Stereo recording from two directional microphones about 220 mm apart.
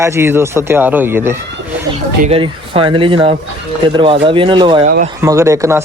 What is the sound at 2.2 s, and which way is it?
Speech, 25° right (ahead or behind).